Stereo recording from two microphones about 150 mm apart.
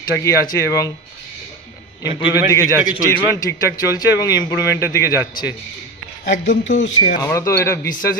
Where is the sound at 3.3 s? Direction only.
20° left (ahead or behind).